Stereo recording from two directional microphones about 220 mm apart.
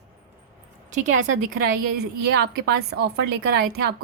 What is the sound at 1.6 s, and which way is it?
A woman's voice, 45° right (ahead or behind).